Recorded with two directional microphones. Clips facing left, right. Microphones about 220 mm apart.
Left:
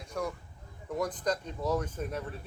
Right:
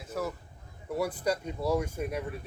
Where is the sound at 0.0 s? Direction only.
5° right (ahead or behind).